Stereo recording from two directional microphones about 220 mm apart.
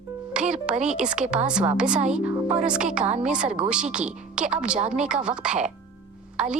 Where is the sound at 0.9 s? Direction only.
5° right (ahead or behind).